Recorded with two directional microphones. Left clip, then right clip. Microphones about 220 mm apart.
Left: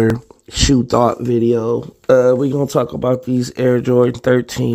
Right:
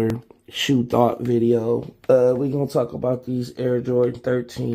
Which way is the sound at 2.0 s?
40° left (ahead or behind).